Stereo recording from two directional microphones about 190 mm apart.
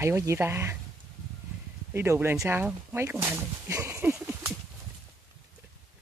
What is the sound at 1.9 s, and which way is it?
Speech, 15° right (ahead or behind).